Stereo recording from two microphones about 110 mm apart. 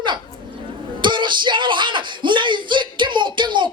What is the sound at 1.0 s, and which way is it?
Speech, 45° right (ahead or behind).